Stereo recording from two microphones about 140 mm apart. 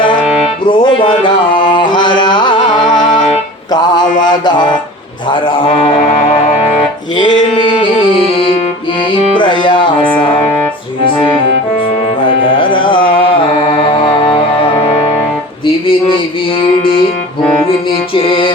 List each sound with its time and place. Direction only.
0.6 s music: 35° left (ahead or behind)
4.2 s a man's voice: 30° left (ahead or behind)
7.2 s a sound: 35° left (ahead or behind)
9.3 s music: 35° left (ahead or behind)
15.6 s music: 40° left (ahead or behind)
17.6 s music: 40° left (ahead or behind)